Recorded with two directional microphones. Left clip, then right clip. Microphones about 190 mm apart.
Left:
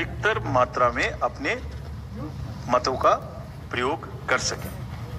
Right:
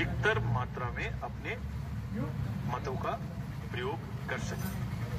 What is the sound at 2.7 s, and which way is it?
Speech, 50° left (ahead or behind).